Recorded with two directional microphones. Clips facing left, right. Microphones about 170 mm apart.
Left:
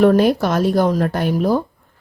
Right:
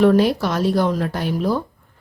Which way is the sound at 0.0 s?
50° left (ahead or behind).